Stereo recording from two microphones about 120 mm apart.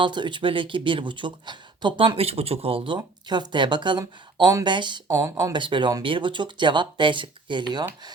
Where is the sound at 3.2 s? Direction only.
40° right (ahead or behind).